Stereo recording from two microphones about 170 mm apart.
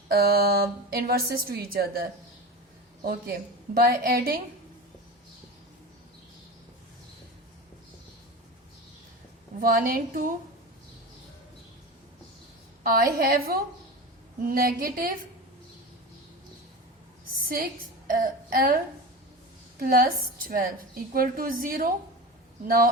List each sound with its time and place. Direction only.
0.1 s a woman's voice: 65° right (ahead or behind)
9.6 s a woman's voice: 60° right (ahead or behind)
12.8 s a woman's voice: 60° right (ahead or behind)
18.1 s a woman's voice: 55° right (ahead or behind)
19.8 s a woman's voice: 55° right (ahead or behind)